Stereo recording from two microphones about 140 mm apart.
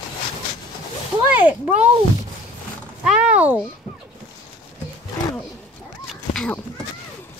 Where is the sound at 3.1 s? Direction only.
10° right (ahead or behind).